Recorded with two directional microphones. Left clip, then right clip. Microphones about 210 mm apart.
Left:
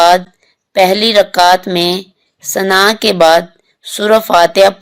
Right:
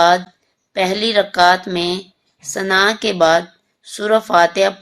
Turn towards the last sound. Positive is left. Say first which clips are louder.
# left 6 dB
turn(degrees=40)  # may be behind; listen again after turning